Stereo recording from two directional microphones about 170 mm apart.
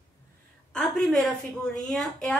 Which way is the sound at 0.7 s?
5° left (ahead or behind).